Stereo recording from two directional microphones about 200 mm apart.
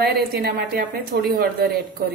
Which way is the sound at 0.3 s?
50° right (ahead or behind).